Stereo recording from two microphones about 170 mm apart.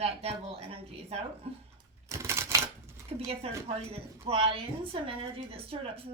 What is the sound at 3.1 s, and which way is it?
Speech, 35° right (ahead or behind).